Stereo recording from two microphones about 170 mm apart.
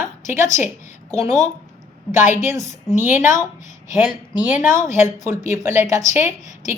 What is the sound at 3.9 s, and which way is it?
Speech, 5° right (ahead or behind).